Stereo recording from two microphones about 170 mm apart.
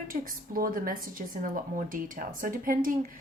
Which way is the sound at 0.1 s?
55° right (ahead or behind).